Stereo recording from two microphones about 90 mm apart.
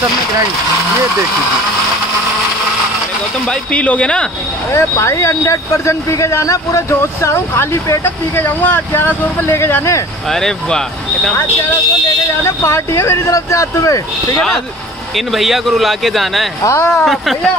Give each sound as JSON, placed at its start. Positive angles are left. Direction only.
{"t": 3.4, "sound": "speech", "side_deg": 15}
{"t": 4.7, "sound": "speech", "side_deg": 35}
{"t": 10.3, "sound": "a man's voice", "side_deg": 5}
{"t": 12.6, "sound": "speech", "side_deg": 30}
{"t": 15.1, "sound": "a man's voice", "side_deg": 0}
{"t": 16.6, "sound": "speech", "side_deg": 35}
{"t": 16.9, "sound": "a man's voice", "side_deg": 0}